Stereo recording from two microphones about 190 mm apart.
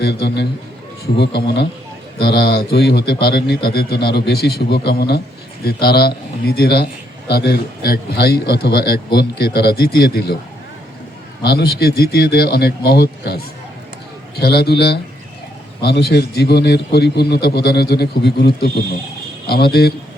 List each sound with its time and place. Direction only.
0.0 s speech: 60° left (ahead or behind)
11.4 s speech: 55° left (ahead or behind)